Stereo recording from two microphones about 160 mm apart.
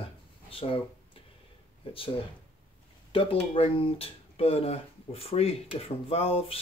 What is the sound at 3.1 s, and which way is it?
Speech, 35° left (ahead or behind).